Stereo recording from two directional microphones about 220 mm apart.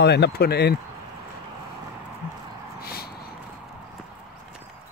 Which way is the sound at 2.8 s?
45° left (ahead or behind).